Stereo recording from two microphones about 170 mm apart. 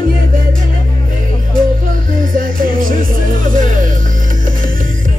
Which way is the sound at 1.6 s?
55° right (ahead or behind).